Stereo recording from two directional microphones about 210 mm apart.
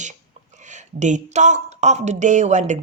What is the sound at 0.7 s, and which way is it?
Speech, 35° right (ahead or behind).